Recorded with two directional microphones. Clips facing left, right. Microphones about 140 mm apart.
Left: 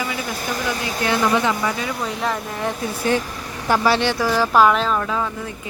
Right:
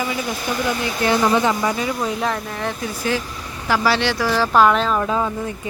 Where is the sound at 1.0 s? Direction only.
35° right (ahead or behind).